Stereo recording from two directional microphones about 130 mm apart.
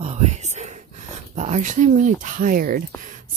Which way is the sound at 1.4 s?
65° right (ahead or behind).